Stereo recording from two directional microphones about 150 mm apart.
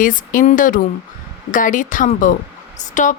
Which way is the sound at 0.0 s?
65° left (ahead or behind).